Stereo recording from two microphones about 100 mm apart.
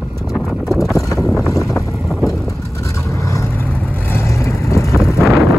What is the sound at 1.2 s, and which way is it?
Boat, centre (ahead or behind).